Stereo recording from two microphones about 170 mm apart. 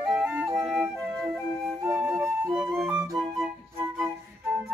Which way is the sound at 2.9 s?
15° right (ahead or behind).